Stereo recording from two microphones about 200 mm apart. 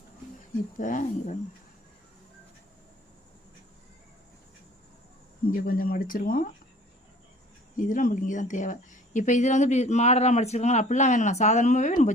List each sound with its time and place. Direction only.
0.8 s speech: 40° left (ahead or behind)
5.5 s speech: 45° left (ahead or behind)
7.8 s speech: 40° left (ahead or behind)